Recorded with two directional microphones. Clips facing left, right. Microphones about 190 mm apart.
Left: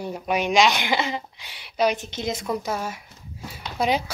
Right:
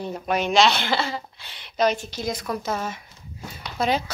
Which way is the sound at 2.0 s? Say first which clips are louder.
Even; 20° left (ahead or behind).